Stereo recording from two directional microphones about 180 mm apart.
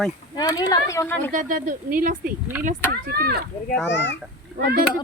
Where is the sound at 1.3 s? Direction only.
45° right (ahead or behind).